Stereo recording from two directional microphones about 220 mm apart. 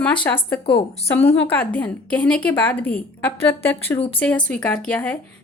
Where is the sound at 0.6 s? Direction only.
25° left (ahead or behind).